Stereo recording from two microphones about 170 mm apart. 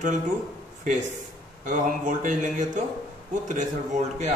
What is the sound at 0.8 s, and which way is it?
Speech, 45° right (ahead or behind).